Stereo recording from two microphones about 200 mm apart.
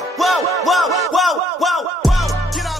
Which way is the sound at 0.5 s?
Centre (ahead or behind).